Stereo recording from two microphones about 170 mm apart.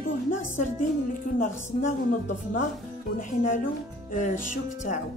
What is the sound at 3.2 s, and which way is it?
Speech, 50° left (ahead or behind).